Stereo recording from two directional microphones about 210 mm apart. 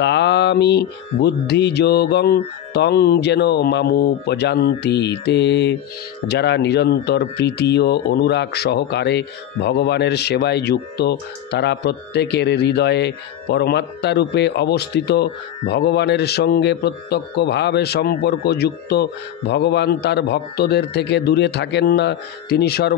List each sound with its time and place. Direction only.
0.0 s speech: 55° left (ahead or behind)